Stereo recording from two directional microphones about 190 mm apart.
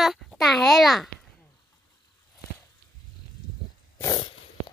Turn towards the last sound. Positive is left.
turn(degrees=20)  # may be behind; listen again after turning